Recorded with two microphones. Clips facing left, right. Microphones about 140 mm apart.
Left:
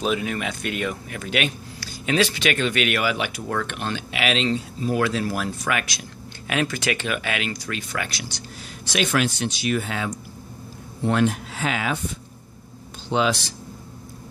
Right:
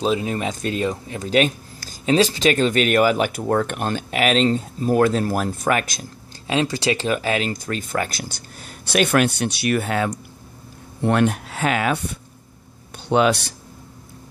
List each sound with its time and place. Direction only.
0.0 s speech: 30° right (ahead or behind); by 5.8 s 45° right (ahead or behind)
6.4 s speech: 25° right (ahead or behind); by 8.3 s 40° right (ahead or behind)
8.9 s speech: 55° right (ahead or behind)